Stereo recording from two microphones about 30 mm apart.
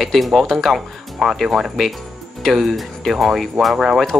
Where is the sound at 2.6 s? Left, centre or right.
Centre.